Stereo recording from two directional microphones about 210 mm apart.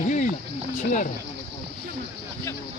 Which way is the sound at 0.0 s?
35° left (ahead or behind).